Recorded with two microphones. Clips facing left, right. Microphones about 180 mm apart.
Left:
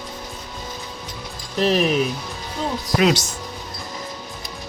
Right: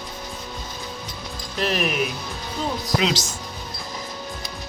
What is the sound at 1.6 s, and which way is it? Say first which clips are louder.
Speech: left 5 dB; 30° left (ahead or behind).